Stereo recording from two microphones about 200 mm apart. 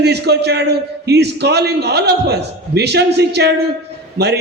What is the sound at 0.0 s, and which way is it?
A man's voice, 55° right (ahead or behind).